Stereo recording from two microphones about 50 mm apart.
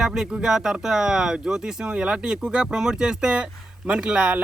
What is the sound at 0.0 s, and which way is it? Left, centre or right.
A man's voice, centre.